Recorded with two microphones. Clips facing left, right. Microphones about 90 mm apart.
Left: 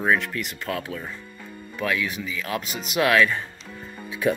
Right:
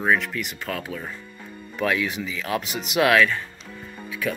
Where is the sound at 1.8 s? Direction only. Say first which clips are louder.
Right 2 dB; 20° right (ahead or behind).